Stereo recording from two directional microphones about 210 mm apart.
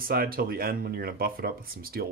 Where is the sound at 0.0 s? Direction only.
45° right (ahead or behind).